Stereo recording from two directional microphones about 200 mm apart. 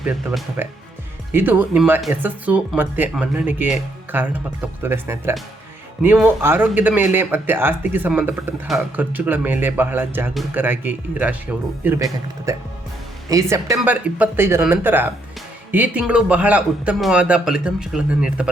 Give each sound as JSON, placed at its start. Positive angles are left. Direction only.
{"t": 0.0, "sound": "a man's voice", "side_deg": -5}